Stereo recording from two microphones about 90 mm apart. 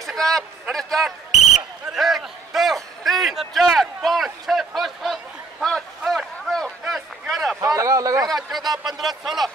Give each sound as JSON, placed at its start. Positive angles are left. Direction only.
{"t": 0.0, "sound": "speech", "side_deg": 5}
{"t": 1.9, "sound": "a sound", "side_deg": 0}
{"t": 7.6, "sound": "speech", "side_deg": -35}
{"t": 8.3, "sound": "speech", "side_deg": 0}